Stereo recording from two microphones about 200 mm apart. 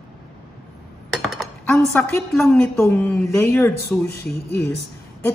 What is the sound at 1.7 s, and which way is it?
A woman's voice, 5° left (ahead or behind).